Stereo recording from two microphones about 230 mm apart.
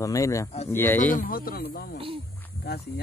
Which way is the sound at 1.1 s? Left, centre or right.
Left.